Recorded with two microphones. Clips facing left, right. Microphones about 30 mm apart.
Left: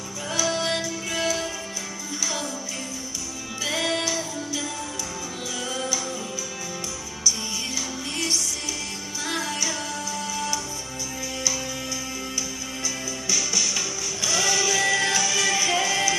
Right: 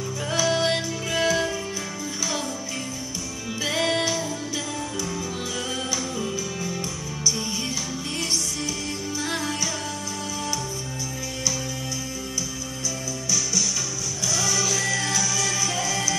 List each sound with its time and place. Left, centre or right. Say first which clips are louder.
0.4 s music: right 2 dB; right
3.6 s music: right 2 dB; centre
9.3 s music: left 2 dB; centre
13.3 s music: left 1 dB; centre